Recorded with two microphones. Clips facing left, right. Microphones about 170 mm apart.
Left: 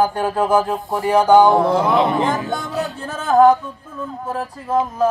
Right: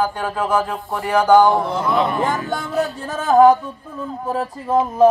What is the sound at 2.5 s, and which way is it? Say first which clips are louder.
Music: right 2 dB; centre (ahead or behind).